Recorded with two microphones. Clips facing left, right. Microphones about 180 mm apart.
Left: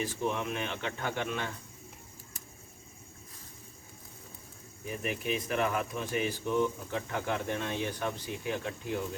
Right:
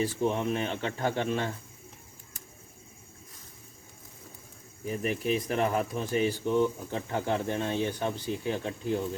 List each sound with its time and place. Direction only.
0.0 s speech: 35° right (ahead or behind)
4.9 s speech: 35° right (ahead or behind)